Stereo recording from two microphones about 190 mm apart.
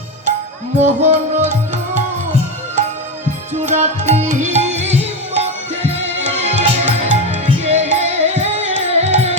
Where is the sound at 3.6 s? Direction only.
40° right (ahead or behind).